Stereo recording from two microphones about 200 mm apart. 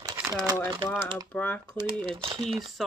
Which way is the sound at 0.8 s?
25° right (ahead or behind).